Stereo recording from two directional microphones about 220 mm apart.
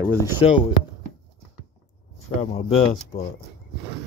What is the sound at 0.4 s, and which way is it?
Speech, 25° left (ahead or behind).